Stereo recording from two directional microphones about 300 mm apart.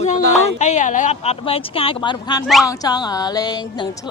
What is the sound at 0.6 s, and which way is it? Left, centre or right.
A woman's voice, left.